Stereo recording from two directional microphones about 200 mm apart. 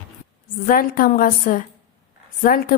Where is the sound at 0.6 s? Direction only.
45° left (ahead or behind).